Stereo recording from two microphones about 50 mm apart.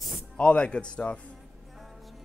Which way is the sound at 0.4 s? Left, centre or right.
Left.